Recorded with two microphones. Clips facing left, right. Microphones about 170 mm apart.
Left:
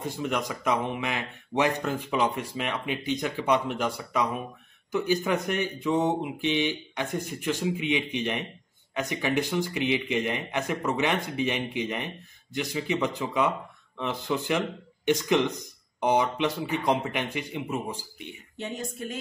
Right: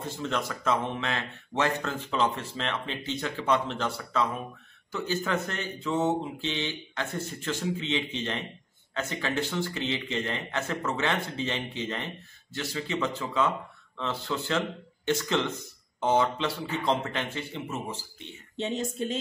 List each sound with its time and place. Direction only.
0.0 s speech: 15° left (ahead or behind)
18.6 s speech: 25° right (ahead or behind)